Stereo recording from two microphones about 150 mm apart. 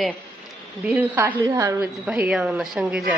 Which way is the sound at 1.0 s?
10° right (ahead or behind).